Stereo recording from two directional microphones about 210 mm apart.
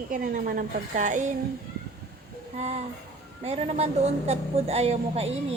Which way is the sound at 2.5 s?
30° right (ahead or behind).